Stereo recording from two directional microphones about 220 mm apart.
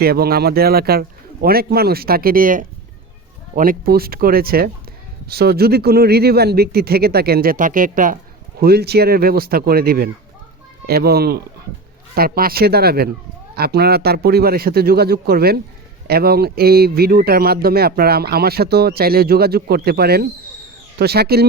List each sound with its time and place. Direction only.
0.0 s speech: 45° right (ahead or behind)